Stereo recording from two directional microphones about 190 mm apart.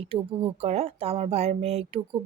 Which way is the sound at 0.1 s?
30° right (ahead or behind).